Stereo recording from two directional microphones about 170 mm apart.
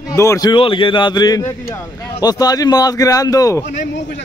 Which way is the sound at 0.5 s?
30° left (ahead or behind).